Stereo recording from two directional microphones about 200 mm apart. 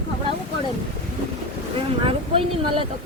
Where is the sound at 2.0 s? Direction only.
25° right (ahead or behind).